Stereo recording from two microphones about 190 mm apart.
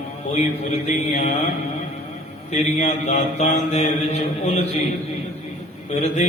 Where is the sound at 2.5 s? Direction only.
40° left (ahead or behind).